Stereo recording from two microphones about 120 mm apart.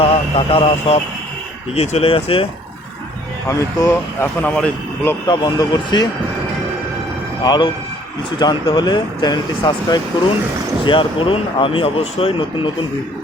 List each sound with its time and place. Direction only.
0.0 s speech: 50° left (ahead or behind)
3.5 s speech: 25° left (ahead or behind)
5.2 s speech: 35° left (ahead or behind)
7.4 s speech: 35° left (ahead or behind)